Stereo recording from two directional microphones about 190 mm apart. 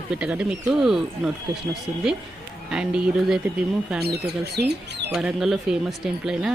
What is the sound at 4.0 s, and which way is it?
Speech, 60° right (ahead or behind).